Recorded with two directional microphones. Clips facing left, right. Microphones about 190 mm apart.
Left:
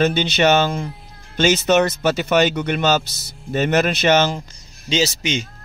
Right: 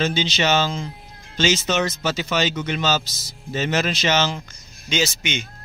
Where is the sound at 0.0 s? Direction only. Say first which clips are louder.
Left 5 dB; 60° left (ahead or behind).